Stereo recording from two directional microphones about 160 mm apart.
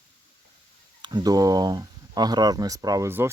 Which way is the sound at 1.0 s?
25° right (ahead or behind).